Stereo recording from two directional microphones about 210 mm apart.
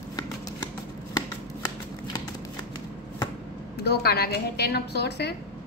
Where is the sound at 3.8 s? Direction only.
50° left (ahead or behind).